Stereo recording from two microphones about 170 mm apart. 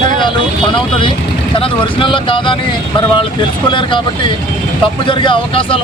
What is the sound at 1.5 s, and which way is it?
Speech, 30° left (ahead or behind).